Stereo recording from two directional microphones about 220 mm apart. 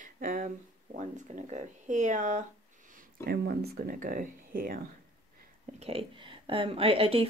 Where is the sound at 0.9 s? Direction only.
35° right (ahead or behind).